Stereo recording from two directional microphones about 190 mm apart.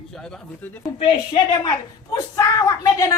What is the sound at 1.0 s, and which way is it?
A woman's voice, 25° left (ahead or behind).